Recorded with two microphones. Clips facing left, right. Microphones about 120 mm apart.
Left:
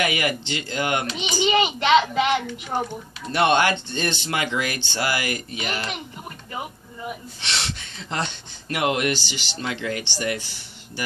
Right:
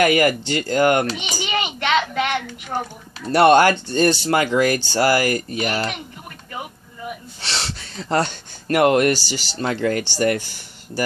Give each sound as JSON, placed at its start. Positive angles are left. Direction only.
{"t": 0.0, "sound": "speech", "side_deg": -45}
{"t": 1.4, "sound": "a child's voice", "side_deg": 10}
{"t": 3.2, "sound": "speech", "side_deg": -40}
{"t": 7.3, "sound": "speech", "side_deg": -35}